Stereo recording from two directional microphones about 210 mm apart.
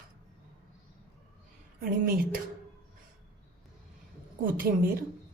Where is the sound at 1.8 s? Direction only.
45° right (ahead or behind).